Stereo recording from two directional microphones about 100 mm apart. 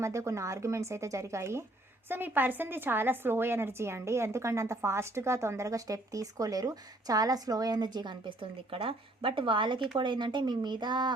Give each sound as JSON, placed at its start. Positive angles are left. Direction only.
{"t": 0.0, "sound": "a woman's voice", "side_deg": -30}
{"t": 8.4, "sound": "speech", "side_deg": -65}